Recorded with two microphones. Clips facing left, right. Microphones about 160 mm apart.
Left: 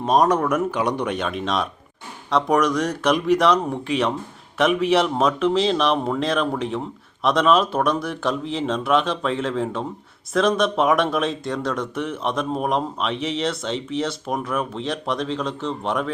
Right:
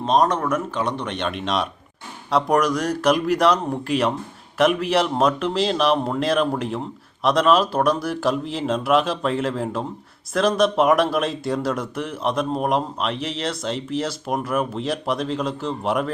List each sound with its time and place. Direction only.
0.0 s speech: 10° left (ahead or behind)